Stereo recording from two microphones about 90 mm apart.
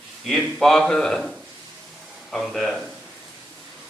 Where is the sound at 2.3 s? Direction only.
Centre (ahead or behind).